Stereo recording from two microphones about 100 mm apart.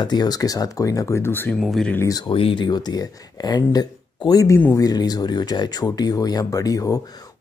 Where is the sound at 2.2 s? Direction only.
60° left (ahead or behind).